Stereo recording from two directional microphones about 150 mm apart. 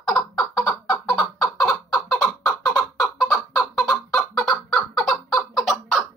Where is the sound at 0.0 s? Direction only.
Centre (ahead or behind).